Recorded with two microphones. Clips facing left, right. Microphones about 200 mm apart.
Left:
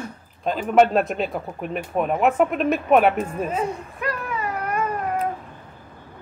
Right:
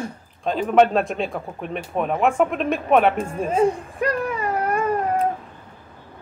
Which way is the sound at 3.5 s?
30° right (ahead or behind).